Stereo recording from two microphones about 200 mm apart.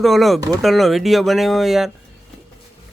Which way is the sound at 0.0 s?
Centre (ahead or behind).